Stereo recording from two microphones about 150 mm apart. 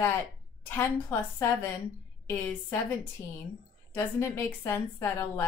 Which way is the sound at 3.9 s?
15° left (ahead or behind).